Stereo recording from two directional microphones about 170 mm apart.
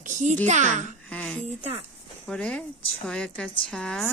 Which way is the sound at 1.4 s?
40° right (ahead or behind).